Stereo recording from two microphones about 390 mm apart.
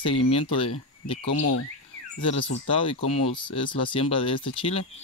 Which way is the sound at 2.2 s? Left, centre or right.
Centre.